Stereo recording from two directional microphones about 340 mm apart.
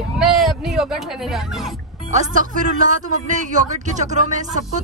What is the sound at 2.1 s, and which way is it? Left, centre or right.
Speech, right.